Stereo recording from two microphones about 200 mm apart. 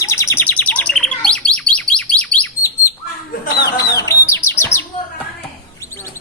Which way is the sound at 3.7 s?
15° left (ahead or behind).